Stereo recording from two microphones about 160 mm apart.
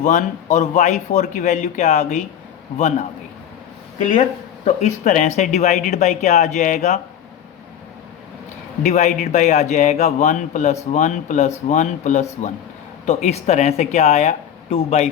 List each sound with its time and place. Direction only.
0.0 s a man's voice: 50° left (ahead or behind)
8.8 s a man's voice: 50° left (ahead or behind)